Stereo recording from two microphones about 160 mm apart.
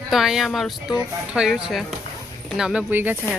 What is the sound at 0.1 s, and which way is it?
A woman's voice, centre (ahead or behind).